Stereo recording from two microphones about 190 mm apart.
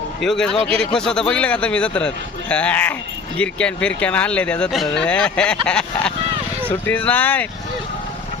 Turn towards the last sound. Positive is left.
turn(degrees=10)  # may be behind; listen again after turning